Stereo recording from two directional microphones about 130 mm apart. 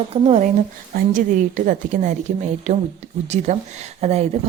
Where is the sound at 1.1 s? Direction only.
90° right.